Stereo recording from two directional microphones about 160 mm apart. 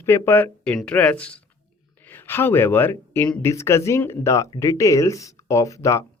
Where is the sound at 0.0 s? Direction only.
15° left (ahead or behind).